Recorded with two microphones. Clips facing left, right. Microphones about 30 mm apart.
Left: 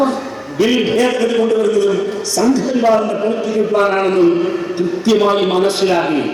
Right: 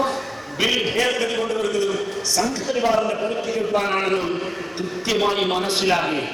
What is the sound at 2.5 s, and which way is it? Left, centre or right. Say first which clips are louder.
Speech: left 8 dB; centre.